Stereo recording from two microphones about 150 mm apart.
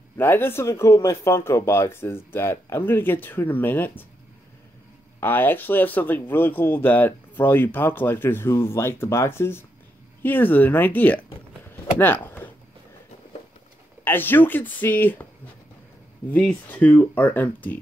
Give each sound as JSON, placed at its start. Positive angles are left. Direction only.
{"t": 0.2, "sound": "speech", "side_deg": 15}
{"t": 5.2, "sound": "speech", "side_deg": 15}
{"t": 14.0, "sound": "speech", "side_deg": 15}
{"t": 16.3, "sound": "speech", "side_deg": 10}